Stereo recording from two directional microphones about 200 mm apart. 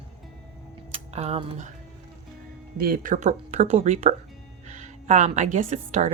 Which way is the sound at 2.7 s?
45° right (ahead or behind).